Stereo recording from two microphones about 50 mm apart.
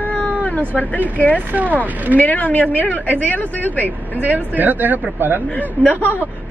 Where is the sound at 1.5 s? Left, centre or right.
Right.